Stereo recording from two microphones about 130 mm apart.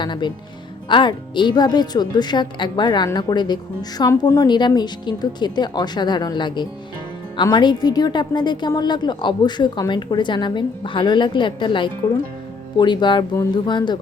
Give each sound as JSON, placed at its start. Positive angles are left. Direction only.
{"t": 0.0, "sound": "a woman's voice", "side_deg": 35}